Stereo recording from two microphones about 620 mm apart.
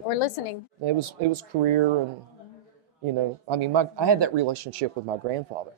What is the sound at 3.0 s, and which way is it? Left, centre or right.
Speech, right.